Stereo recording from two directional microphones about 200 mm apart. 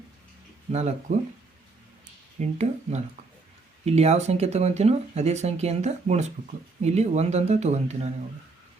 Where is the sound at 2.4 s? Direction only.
35° right (ahead or behind).